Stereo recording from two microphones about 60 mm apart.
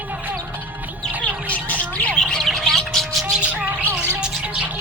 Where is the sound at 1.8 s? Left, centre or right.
Left.